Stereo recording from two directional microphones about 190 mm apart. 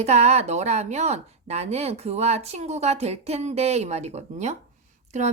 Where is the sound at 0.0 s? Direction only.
35° right (ahead or behind).